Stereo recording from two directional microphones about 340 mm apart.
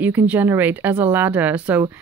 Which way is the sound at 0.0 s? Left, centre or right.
Centre.